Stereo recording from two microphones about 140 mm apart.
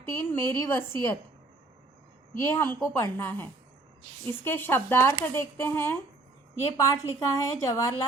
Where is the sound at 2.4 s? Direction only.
15° left (ahead or behind).